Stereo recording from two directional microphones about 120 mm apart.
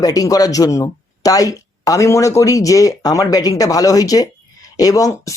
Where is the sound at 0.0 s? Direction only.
30° left (ahead or behind).